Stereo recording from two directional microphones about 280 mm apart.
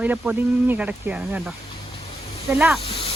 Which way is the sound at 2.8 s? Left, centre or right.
Centre.